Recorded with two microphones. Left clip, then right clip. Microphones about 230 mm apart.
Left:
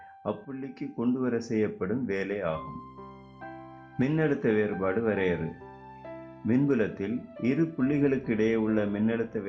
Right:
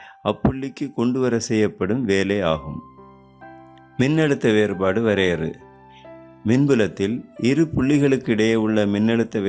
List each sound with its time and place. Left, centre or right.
0.2 s speech: right
4.0 s speech: right